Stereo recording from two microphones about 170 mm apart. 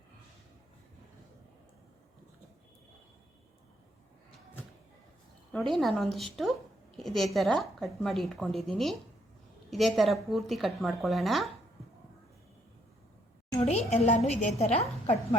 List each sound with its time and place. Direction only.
5.7 s a woman's voice: centre (ahead or behind)
13.7 s a woman's voice: 40° left (ahead or behind)